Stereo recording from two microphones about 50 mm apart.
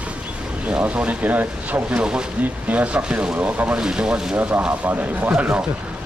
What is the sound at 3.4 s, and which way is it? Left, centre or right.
Speech, right.